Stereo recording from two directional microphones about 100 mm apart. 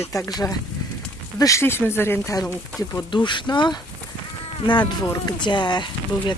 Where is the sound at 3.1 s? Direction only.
50° left (ahead or behind).